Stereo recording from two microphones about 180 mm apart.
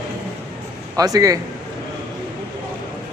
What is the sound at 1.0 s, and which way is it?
Speech, 20° right (ahead or behind).